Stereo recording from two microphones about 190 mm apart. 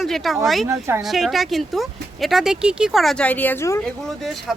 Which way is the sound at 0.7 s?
15° right (ahead or behind).